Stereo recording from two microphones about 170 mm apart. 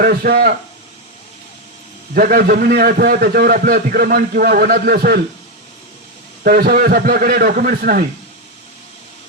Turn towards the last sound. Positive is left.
turn(degrees=-60)  # may be behind; listen again after turning